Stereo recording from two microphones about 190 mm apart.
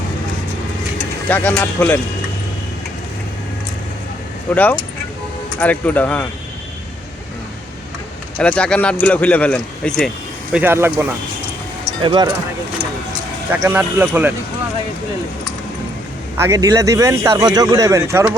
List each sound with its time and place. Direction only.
1.3 s speech: 10° left (ahead or behind)
4.5 s speech: 10° left (ahead or behind)
8.4 s speech: 5° left (ahead or behind)
10.5 s speech: 10° right (ahead or behind)
12.0 s speech: 25° right (ahead or behind)
13.5 s speech: 10° right (ahead or behind)
16.4 s speech: 15° right (ahead or behind)